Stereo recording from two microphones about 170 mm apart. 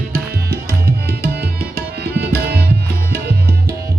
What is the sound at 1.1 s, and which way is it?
Tabla, 70° right (ahead or behind).